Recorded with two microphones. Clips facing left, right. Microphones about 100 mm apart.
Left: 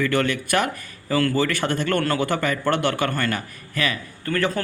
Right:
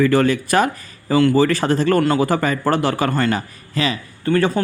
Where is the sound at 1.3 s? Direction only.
35° right (ahead or behind).